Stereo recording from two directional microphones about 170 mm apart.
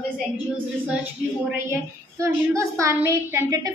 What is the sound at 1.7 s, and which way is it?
A woman's voice, 15° right (ahead or behind).